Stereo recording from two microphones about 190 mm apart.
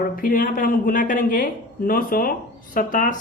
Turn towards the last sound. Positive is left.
turn(degrees=45)  # may be behind; listen again after turning